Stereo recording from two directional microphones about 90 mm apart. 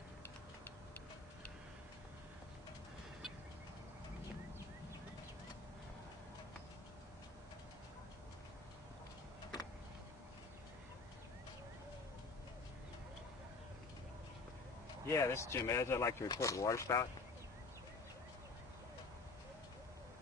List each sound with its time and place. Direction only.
15.0 s speech: 35° left (ahead or behind)